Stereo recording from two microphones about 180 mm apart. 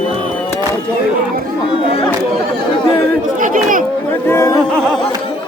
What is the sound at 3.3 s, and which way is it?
Chatter, 50° right (ahead or behind).